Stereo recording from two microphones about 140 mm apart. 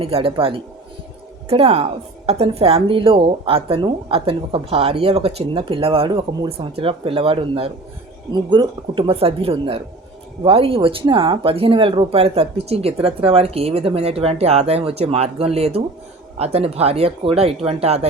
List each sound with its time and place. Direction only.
0.0 s a woman's voice: 40° right (ahead or behind)